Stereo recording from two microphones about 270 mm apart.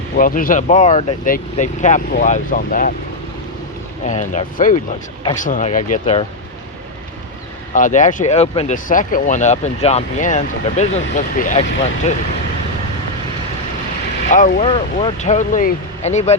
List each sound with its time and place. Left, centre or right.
0.2 s speech: left
4.0 s speech: left
7.7 s speech: left
14.3 s speech: left